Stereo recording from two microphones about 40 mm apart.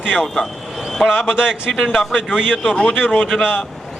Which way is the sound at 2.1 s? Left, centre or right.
Centre.